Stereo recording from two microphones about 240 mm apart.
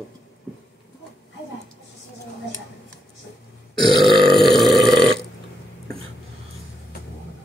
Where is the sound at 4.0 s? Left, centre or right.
Centre.